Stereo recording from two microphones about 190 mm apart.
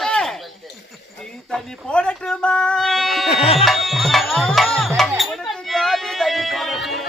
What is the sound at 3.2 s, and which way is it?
Tabla, 30° left (ahead or behind).